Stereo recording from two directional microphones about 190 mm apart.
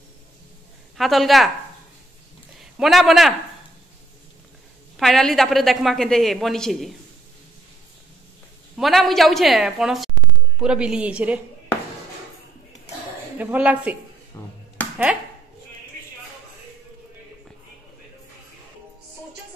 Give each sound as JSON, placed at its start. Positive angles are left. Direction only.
{"t": 0.9, "sound": "a woman's voice", "side_deg": 0}
{"t": 2.8, "sound": "a woman's voice", "side_deg": 0}
{"t": 4.9, "sound": "a woman's voice", "side_deg": 0}
{"t": 8.7, "sound": "a woman's voice", "side_deg": 0}
{"t": 13.4, "sound": "a woman's voice", "side_deg": -10}
{"t": 14.3, "sound": "a sound", "side_deg": 15}